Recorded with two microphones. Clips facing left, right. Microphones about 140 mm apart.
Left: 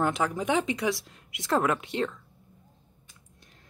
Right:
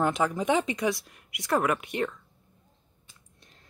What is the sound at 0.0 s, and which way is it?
Speech, 15° right (ahead or behind).